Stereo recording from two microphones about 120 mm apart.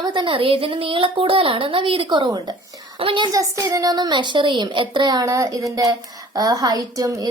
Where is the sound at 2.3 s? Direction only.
40° right (ahead or behind).